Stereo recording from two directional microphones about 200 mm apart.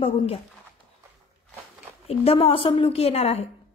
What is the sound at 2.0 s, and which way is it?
A woman's voice, 30° left (ahead or behind).